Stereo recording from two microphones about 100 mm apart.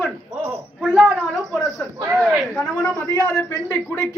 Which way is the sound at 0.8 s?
10° right (ahead or behind).